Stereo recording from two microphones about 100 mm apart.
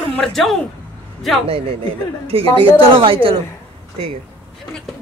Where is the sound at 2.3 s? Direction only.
70° right (ahead or behind).